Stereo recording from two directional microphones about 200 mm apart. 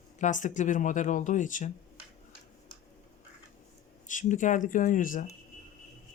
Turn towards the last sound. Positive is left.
turn(degrees=40)  # may be behind; listen again after turning